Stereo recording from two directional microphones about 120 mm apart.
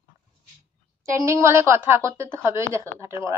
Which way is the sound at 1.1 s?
25° right (ahead or behind).